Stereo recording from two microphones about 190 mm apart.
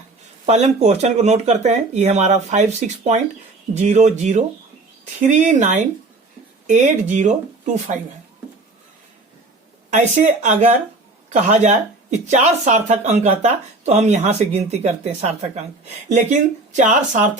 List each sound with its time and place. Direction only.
0.4 s speech: 35° right (ahead or behind)
9.9 s speech: 40° right (ahead or behind)